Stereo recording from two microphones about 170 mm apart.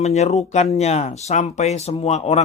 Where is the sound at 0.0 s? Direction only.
40° left (ahead or behind).